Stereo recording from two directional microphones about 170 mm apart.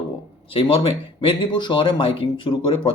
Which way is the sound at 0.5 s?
30° left (ahead or behind).